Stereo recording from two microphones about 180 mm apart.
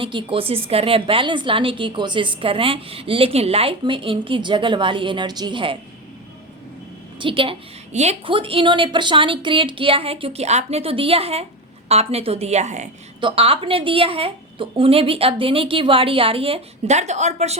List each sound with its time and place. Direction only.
0.0 s a woman's voice: 30° right (ahead or behind)
7.2 s a woman's voice: 30° right (ahead or behind)
13.1 s speech: 30° right (ahead or behind)